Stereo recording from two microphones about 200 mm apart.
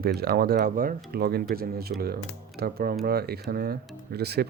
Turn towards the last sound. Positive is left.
turn(degrees=-55)  # may be behind; listen again after turning